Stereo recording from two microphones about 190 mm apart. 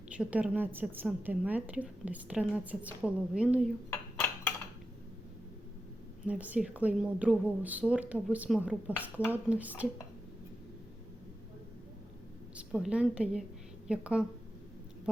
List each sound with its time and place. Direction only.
0.1 s a woman's voice: 5° right (ahead or behind)
3.8 s dishes: 10° left (ahead or behind)
6.2 s a woman's voice: 5° right (ahead or behind)
12.5 s a woman's voice: 5° right (ahead or behind)